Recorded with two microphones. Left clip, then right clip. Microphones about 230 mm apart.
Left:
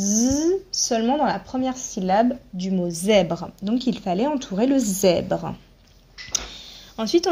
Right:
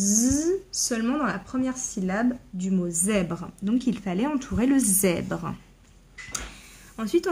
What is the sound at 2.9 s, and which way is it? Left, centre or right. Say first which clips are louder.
Speech: left 10 dB; centre.